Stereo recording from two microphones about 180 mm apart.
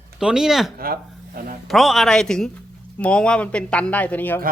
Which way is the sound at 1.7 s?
Centre (ahead or behind).